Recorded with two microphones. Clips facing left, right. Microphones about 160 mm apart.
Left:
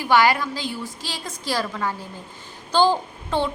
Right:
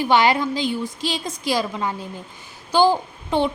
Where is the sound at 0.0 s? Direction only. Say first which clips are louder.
Right 1 dB; 20° right (ahead or behind).